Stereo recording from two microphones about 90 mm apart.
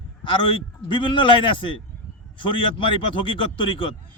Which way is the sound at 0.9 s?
65° left (ahead or behind).